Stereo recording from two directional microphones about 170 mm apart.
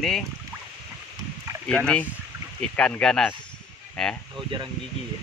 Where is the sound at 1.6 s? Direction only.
5° left (ahead or behind).